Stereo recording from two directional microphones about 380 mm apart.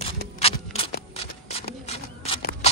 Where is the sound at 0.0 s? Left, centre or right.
Centre.